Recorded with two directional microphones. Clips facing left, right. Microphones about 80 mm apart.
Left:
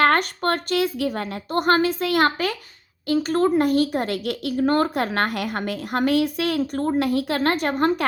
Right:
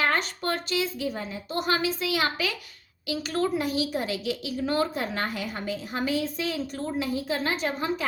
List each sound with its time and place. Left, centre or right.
0.0 s a woman's voice: left